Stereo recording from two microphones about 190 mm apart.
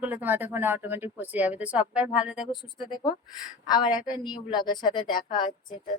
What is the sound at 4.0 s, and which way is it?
Speech, 5° right (ahead or behind).